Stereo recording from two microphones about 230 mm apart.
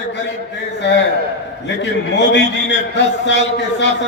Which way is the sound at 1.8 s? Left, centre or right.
Left.